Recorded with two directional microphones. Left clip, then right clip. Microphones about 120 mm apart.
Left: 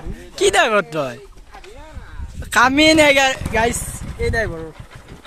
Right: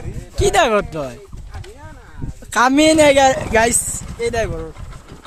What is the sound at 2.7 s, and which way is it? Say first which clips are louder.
Speech: right 2 dB; 30° right (ahead or behind).